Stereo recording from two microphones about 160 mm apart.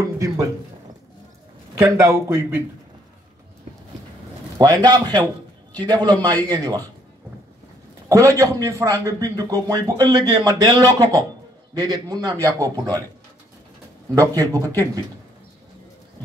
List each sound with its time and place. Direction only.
0.0 s a sound: 20° right (ahead or behind)
1.8 s speech: 20° right (ahead or behind)
4.6 s a man's voice: 25° right (ahead or behind)
8.1 s a man's voice: 20° right (ahead or behind)
14.1 s a man's voice: 20° right (ahead or behind)